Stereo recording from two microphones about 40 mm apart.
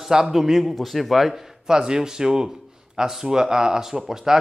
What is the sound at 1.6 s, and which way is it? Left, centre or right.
A man's voice, centre.